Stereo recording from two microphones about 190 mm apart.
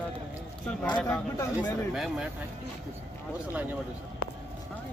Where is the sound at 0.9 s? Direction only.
5° left (ahead or behind).